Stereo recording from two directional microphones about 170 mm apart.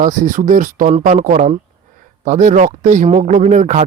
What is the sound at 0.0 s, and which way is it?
A man's voice, 50° right (ahead or behind).